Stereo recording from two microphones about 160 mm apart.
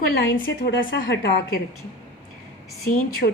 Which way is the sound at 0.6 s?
90° left.